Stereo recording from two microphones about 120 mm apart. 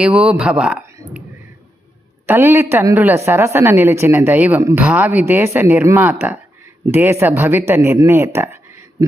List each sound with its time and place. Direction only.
0.0 s speech: 10° right (ahead or behind)
2.2 s a woman's voice: 20° right (ahead or behind)